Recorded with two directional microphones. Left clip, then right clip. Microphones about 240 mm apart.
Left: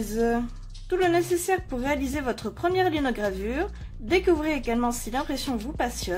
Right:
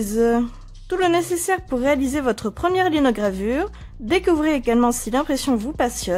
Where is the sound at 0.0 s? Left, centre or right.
Right.